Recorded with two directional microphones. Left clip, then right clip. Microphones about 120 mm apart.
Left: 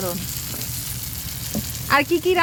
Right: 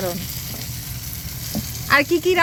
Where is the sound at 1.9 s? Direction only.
20° left (ahead or behind).